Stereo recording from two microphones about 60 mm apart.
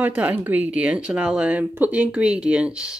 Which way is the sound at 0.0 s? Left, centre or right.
Right.